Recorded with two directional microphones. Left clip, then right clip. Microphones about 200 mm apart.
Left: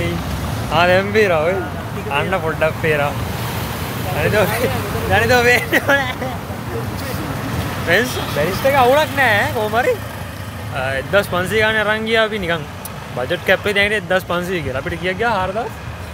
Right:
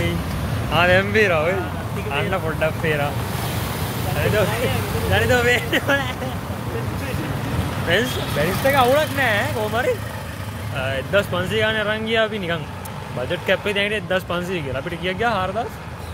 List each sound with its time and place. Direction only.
0.7 s speech: 10° left (ahead or behind)
4.2 s speech: 25° left (ahead or behind)
7.9 s speech: 10° left (ahead or behind)